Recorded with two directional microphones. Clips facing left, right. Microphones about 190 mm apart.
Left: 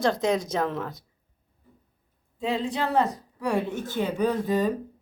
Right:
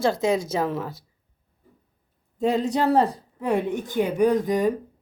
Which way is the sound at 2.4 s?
45° right (ahead or behind).